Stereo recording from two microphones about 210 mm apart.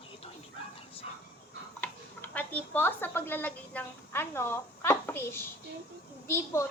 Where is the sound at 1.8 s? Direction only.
10° left (ahead or behind).